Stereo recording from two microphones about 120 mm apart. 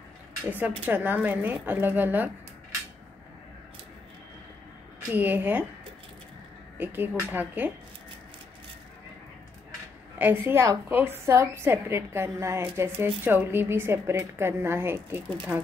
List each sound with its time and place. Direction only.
0.5 s a woman's voice: 15° right (ahead or behind)
5.1 s a woman's voice: 15° right (ahead or behind)
6.8 s a woman's voice: 15° right (ahead or behind)
10.1 s a woman's voice: 15° right (ahead or behind)